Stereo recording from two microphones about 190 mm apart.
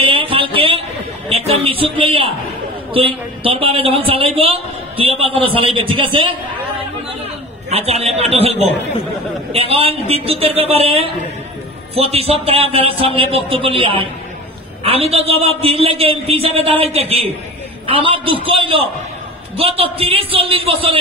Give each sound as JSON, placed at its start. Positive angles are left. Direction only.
{"t": 0.0, "sound": "a sound", "side_deg": -25}
{"t": 2.9, "sound": "a woman's voice", "side_deg": -30}
{"t": 7.7, "sound": "a man's voice", "side_deg": -30}